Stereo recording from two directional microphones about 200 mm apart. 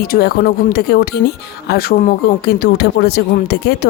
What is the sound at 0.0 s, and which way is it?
Speech, 50° left (ahead or behind).